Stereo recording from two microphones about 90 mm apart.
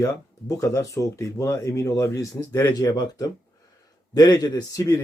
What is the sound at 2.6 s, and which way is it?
Speech, 45° left (ahead or behind).